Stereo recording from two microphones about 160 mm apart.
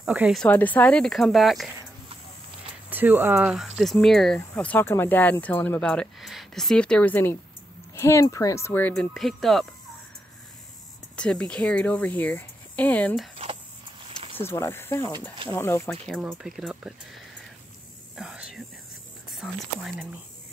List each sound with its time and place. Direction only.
0.0 s speech: 5° right (ahead or behind)
0.4 s speech: 10° left (ahead or behind)
2.9 s speech: 10° right (ahead or behind)
11.1 s speech: 5° left (ahead or behind)
14.4 s speech: 15° left (ahead or behind)
16.1 s speech: centre (ahead or behind)
18.1 s whispering: 5° right (ahead or behind)
19.3 s speech: centre (ahead or behind)